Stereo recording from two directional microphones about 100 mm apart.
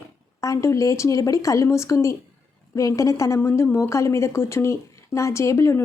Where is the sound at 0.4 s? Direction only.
30° left (ahead or behind).